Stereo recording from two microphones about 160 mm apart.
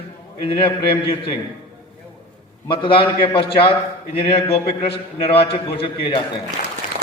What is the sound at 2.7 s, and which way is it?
Speech, 35° left (ahead or behind).